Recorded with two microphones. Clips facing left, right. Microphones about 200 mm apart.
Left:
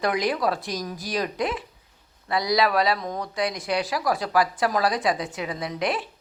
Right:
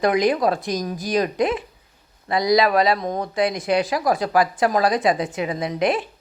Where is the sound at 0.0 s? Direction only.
20° right (ahead or behind).